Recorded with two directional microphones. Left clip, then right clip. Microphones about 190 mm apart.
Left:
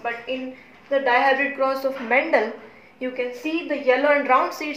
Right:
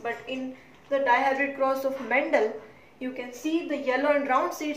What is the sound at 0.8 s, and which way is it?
A woman's voice, 20° left (ahead or behind).